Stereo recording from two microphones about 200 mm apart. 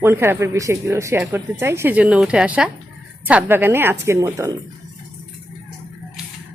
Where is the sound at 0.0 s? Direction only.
10° right (ahead or behind).